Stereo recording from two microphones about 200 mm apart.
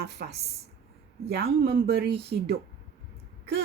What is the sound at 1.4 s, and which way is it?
Speech, 55° right (ahead or behind).